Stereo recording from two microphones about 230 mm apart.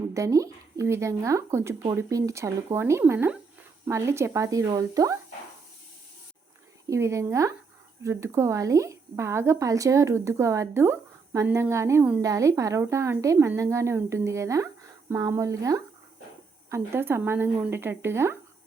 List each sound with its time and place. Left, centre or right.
0.1 s a woman's voice: centre
6.8 s a woman's voice: centre